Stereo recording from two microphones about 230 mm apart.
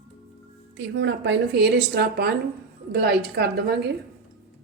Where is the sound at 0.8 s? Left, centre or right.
Right.